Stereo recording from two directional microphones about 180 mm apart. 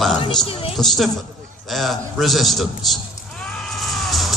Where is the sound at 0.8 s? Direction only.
Centre (ahead or behind).